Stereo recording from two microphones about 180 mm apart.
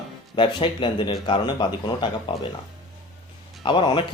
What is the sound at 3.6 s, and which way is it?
Speech, 25° left (ahead or behind).